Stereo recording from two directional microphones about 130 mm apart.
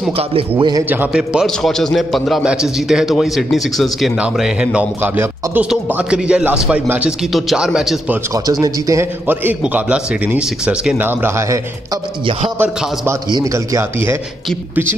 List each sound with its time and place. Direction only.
0.2 s a man's voice: 45° right (ahead or behind)
0.6 s a man's voice: 35° right (ahead or behind)
0.8 s a man's voice: 15° right (ahead or behind)
8.5 s speech: 30° right (ahead or behind)
9.3 s a man's voice: 15° right (ahead or behind)